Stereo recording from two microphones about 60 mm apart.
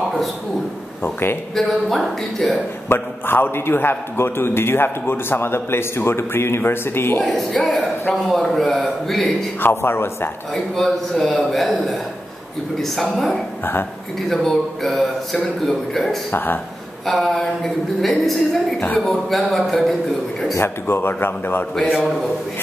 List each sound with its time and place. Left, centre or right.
1.0 s a man's voice: left
1.5 s a man's voice: centre
2.9 s a man's voice: left
7.2 s a man's voice: centre
9.6 s a man's voice: left
10.5 s a man's voice: centre
14.3 s a man's voice: centre
16.3 s a man's voice: left
17.0 s a man's voice: centre
20.5 s a man's voice: left